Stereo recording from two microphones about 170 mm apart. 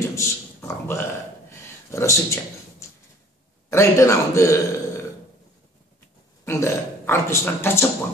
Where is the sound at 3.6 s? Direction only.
15° left (ahead or behind).